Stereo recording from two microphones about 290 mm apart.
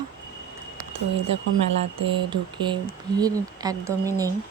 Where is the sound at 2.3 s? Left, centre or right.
Centre.